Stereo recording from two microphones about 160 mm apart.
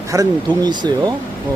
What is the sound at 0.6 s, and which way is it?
Speech, 25° right (ahead or behind).